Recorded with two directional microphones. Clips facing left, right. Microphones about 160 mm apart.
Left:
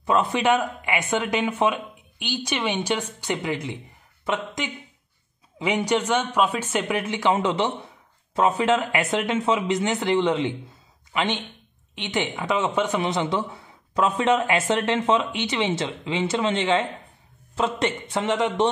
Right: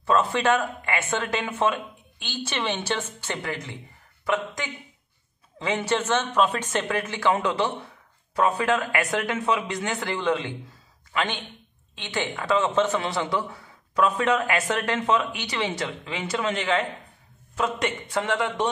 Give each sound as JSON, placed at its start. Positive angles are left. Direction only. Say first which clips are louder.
{"t": 0.0, "sound": "speech", "louder": "left 1 dB", "side_deg": 15}